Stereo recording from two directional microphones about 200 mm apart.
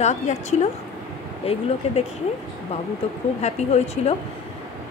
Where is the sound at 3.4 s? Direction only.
35° left (ahead or behind).